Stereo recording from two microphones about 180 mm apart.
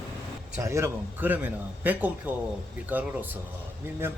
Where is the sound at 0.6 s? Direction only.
15° right (ahead or behind).